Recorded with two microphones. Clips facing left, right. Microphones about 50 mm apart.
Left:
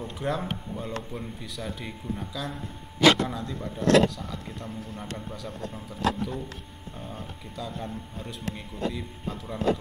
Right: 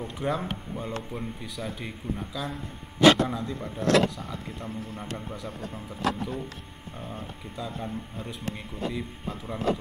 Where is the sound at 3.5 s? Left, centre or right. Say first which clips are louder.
Even; right.